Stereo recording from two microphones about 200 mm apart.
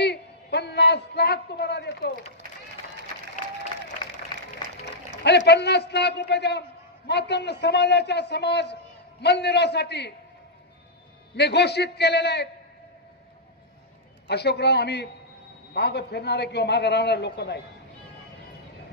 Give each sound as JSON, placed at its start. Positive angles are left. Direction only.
{"t": 0.0, "sound": "a sound", "side_deg": 55}
{"t": 5.2, "sound": "a man's voice", "side_deg": 60}
{"t": 11.3, "sound": "a man's voice", "side_deg": 55}
{"t": 14.2, "sound": "a man's voice", "side_deg": 55}